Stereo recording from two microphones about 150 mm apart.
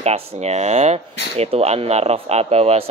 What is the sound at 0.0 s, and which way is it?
Speech, 45° right (ahead or behind).